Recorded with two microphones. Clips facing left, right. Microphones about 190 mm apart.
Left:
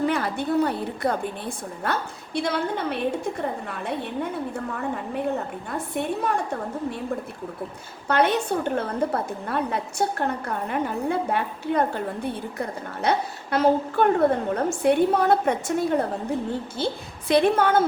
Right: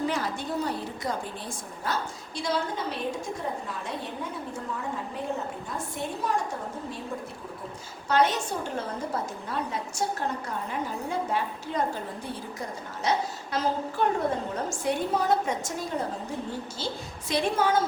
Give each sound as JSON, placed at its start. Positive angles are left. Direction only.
{"t": 0.0, "sound": "a woman's voice", "side_deg": 60}
{"t": 8.0, "sound": "a woman's voice", "side_deg": 60}